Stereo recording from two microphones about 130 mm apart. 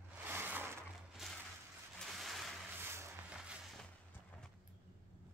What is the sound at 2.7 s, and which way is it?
Vehicle, 20° right (ahead or behind).